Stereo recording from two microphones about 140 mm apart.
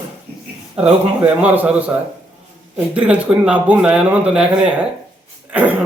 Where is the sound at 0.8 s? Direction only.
45° right (ahead or behind).